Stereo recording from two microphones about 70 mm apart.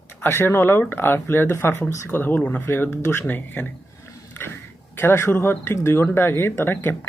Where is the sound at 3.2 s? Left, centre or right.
Left.